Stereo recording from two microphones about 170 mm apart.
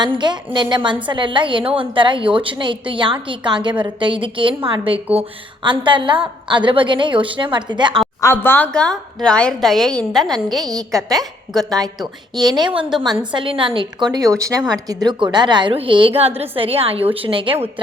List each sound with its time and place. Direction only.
0.0 s a woman's voice: 25° right (ahead or behind)
8.2 s a woman's voice: 15° left (ahead or behind)
12.3 s a woman's voice: 25° right (ahead or behind)